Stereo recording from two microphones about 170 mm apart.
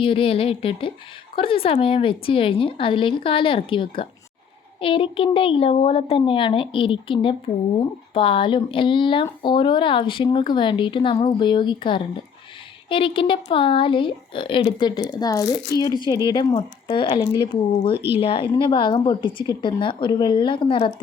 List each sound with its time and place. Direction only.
0.0 s a woman's voice: 30° left (ahead or behind)